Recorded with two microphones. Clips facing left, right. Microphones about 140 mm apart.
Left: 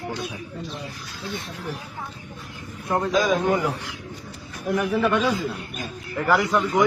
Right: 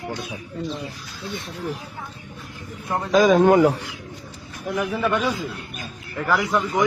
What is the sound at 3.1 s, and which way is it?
Speech, 55° right (ahead or behind).